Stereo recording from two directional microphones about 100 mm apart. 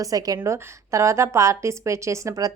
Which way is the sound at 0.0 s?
35° right (ahead or behind).